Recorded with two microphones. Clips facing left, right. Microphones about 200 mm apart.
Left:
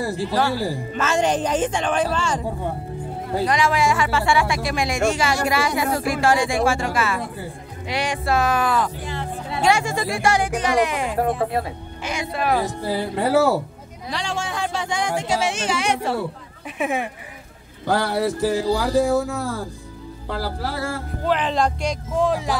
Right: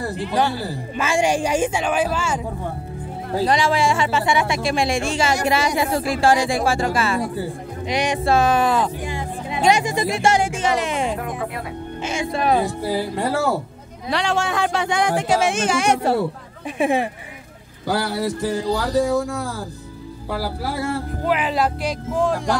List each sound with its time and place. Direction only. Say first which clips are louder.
0.3 s speech: right 2 dB; 15° right (ahead or behind)
3.4 s speech: right 1 dB; 30° right (ahead or behind)
7.9 s speech: right 3 dB; 20° right (ahead or behind)
9.0 s speech: right 2 dB; 15° right (ahead or behind)
11.1 s speech: left 6 dB; 30° left (ahead or behind)
12.0 s speech: right 2 dB; 25° right (ahead or behind)
12.8 s speech: right 1 dB; 10° right (ahead or behind)
14.1 s speech: right 6 dB; 65° right (ahead or behind); by 16.2 s 40° right (ahead or behind)
16.7 s speech: right 4 dB; 30° right (ahead or behind)
17.8 s a man's voice: left 1 dB; centre (ahead or behind)
20.2 s a man's voice: right 1 dB; 10° right (ahead or behind)